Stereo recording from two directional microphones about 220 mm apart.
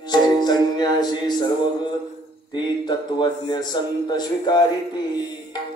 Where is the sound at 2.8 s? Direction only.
20° left (ahead or behind).